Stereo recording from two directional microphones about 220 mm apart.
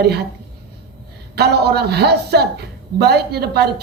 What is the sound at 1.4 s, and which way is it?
A woman's voice, 45° right (ahead or behind).